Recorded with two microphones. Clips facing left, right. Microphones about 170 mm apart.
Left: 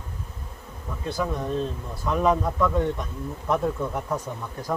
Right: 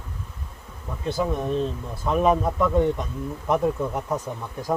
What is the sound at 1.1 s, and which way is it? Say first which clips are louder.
Speech: right 3 dB; 20° right (ahead or behind).